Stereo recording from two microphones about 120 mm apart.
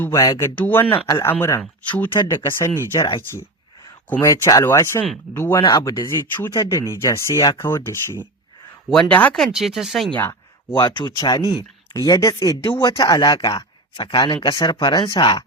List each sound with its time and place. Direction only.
0.1 s speech: 30° left (ahead or behind)
1.0 s speech: 30° left (ahead or behind); by 2.2 s 15° left (ahead or behind)
2.2 s speech: 25° left (ahead or behind)
4.2 s speech: 30° left (ahead or behind); by 9.4 s 10° left (ahead or behind)
9.4 s speech: centre (ahead or behind)
10.7 s speech: 40° left (ahead or behind)
12.6 s speech: 40° left (ahead or behind)